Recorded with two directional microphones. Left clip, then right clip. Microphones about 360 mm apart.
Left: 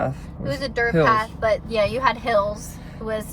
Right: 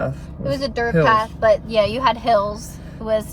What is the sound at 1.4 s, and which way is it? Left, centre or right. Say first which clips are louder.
Speech: right 5 dB; centre.